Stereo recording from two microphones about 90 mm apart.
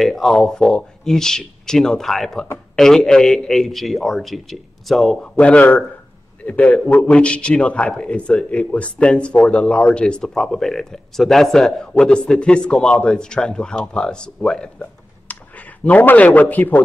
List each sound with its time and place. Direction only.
0.0 s a man's voice: 5° left (ahead or behind)
5.6 s a man's voice: 20° left (ahead or behind)